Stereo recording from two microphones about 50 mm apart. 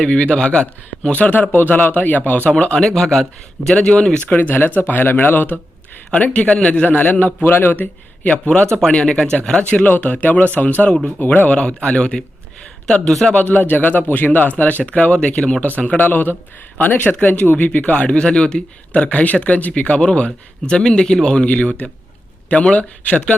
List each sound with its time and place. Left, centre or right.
0.0 s a man's voice: left
2.6 s speech: centre
4.3 s a man's voice: left
6.1 s a man's voice: left
8.3 s speech: left
9.6 s a man's voice: left; by 13.3 s centre
13.3 s a man's voice: left
15.6 s a man's voice: left
19.0 s speech: left